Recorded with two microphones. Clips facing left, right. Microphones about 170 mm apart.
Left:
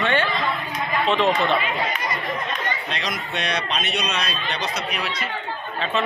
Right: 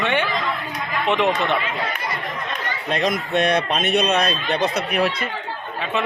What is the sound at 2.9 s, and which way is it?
Speech, 50° right (ahead or behind).